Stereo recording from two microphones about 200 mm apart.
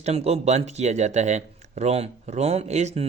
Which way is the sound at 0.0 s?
30° right (ahead or behind).